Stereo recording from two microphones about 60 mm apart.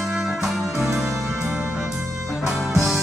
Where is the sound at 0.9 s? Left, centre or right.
Right.